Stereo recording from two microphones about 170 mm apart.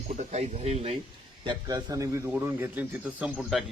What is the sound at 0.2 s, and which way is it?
Speech, 40° right (ahead or behind).